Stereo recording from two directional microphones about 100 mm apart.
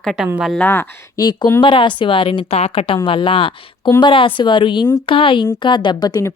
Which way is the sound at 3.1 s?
60° left (ahead or behind).